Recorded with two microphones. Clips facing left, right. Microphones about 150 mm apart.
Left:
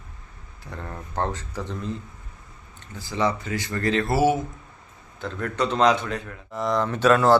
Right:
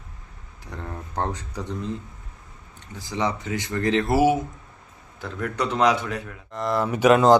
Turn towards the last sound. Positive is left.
turn(degrees=-20)  # may be behind; listen again after turning